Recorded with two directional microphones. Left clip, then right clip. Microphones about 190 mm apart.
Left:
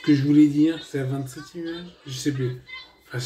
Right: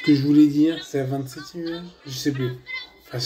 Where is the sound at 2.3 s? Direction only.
40° right (ahead or behind).